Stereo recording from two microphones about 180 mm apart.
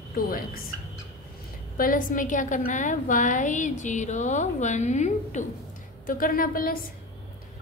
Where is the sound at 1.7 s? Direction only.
50° left (ahead or behind).